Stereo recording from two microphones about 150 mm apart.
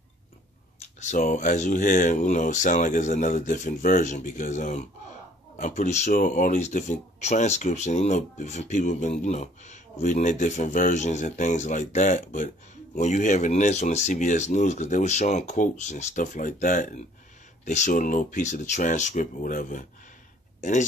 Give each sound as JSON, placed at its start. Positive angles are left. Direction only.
{"t": 0.7, "sound": "speech", "side_deg": 50}